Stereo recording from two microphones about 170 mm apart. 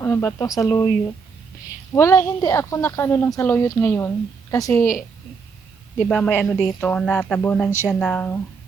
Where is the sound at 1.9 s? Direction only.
15° left (ahead or behind).